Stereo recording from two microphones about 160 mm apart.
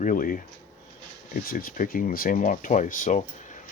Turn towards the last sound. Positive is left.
turn(degrees=50)  # may be behind; listen again after turning